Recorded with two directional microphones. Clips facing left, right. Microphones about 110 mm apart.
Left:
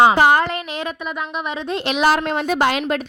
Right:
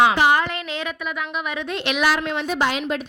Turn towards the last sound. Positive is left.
turn(degrees=60)  # may be behind; listen again after turning